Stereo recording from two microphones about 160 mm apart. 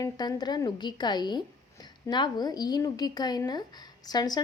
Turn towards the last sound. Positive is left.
turn(degrees=25)  # may be behind; listen again after turning